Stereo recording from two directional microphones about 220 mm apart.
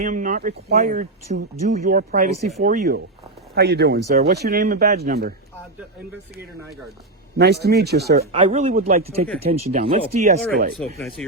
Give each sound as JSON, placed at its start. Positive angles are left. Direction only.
{"t": 0.0, "sound": "speech", "side_deg": -35}
{"t": 7.3, "sound": "speech", "side_deg": -50}
{"t": 8.3, "sound": "speech", "side_deg": -25}
{"t": 10.5, "sound": "speech", "side_deg": -45}
{"t": 11.2, "sound": "speech", "side_deg": 5}